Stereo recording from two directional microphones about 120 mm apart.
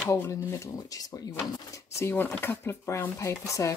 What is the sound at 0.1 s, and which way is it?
Speech, 30° left (ahead or behind).